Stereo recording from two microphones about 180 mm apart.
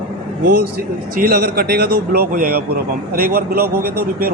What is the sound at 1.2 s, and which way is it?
Speech, 60° right (ahead or behind).